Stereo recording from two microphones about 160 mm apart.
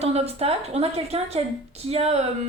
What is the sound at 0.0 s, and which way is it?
A woman's voice, 40° right (ahead or behind).